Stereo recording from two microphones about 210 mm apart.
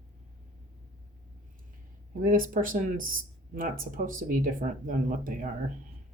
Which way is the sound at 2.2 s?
40° right (ahead or behind).